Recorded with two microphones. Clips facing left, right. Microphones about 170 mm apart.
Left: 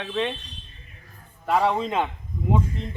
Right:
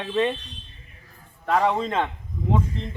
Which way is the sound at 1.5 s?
5° left (ahead or behind).